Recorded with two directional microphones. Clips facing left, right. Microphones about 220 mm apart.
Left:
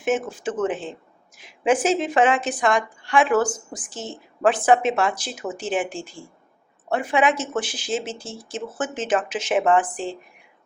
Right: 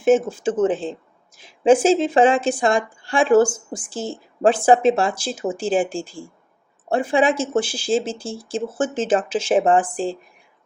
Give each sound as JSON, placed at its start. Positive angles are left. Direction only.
{"t": 0.0, "sound": "speech", "side_deg": -30}